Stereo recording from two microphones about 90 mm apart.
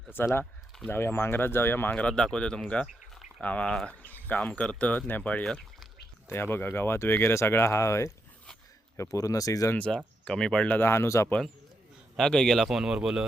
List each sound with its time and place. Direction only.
0.1 s speech: 25° left (ahead or behind); by 2.8 s 10° left (ahead or behind)
2.8 s a sound: 5° right (ahead or behind)
3.4 s speech: 15° left (ahead or behind)
6.2 s speech: 25° left (ahead or behind)
9.7 s speech: 15° left (ahead or behind)
10.7 s speech: 25° left (ahead or behind)
12.1 s a man's voice: 5° left (ahead or behind)
12.6 s speech: 5° right (ahead or behind)